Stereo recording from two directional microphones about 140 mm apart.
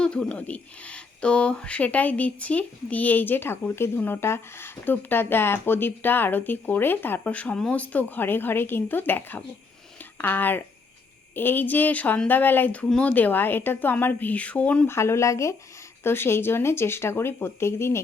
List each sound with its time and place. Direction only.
0.0 s speech: 5° left (ahead or behind)
14.9 s speech: 20° left (ahead or behind)